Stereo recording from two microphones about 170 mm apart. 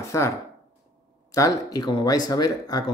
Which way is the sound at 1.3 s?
20° left (ahead or behind).